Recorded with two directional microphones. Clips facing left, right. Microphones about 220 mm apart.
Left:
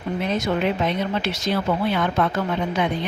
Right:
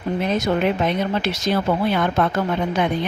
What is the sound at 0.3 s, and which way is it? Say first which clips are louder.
Speech: right 2 dB; 40° right (ahead or behind).